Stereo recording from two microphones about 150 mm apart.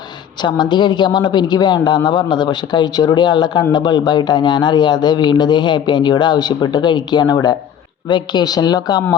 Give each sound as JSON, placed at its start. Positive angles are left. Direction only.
{"t": 0.4, "sound": "a man's voice", "side_deg": 30}